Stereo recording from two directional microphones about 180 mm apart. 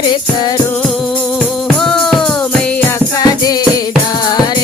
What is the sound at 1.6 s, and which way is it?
Music, 5° left (ahead or behind).